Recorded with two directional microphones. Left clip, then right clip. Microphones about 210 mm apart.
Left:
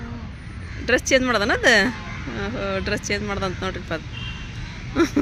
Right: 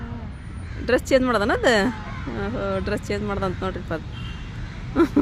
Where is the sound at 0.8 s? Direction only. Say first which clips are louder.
Left 1 dB; 10° right (ahead or behind).